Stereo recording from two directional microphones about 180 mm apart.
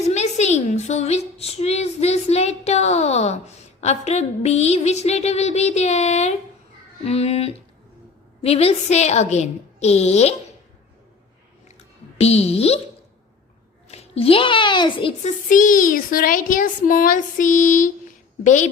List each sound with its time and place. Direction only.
0.0 s a woman's voice: 40° left (ahead or behind)
12.2 s a woman's voice: 35° left (ahead or behind)
13.8 s a child's voice: 35° left (ahead or behind)
15.2 s speech: 45° left (ahead or behind)